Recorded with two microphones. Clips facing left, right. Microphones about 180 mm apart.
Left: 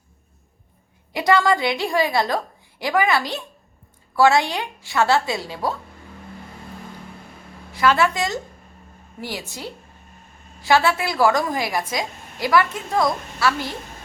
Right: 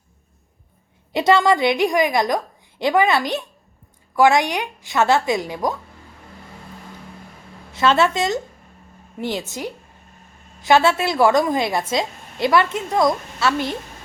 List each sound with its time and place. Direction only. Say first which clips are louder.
1.1 s a woman's voice: right 2 dB; 25° right (ahead or behind)
7.7 s a woman's voice: right 2 dB; 25° right (ahead or behind)